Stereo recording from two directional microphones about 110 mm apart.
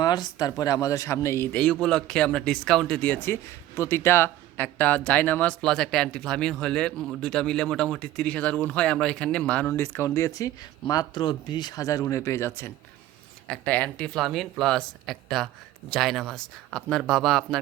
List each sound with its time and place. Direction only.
0.0 s speech: 40° left (ahead or behind)
1.5 s speech: 5° left (ahead or behind)
9.7 s speech: 25° left (ahead or behind)
13.5 s speech: 10° left (ahead or behind)
14.2 s speech: centre (ahead or behind)